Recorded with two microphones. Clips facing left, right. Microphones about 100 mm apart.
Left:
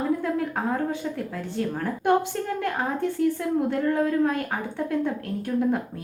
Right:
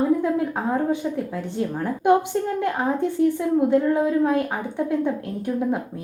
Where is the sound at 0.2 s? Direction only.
20° right (ahead or behind).